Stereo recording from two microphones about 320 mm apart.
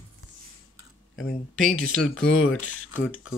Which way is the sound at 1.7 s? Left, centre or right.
Left.